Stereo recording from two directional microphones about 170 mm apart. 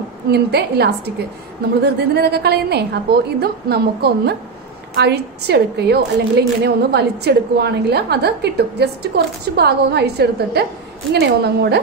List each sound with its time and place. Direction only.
0.3 s a woman's voice: 75° right (ahead or behind)